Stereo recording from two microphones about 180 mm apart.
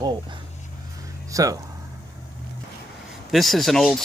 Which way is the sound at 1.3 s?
20° right (ahead or behind).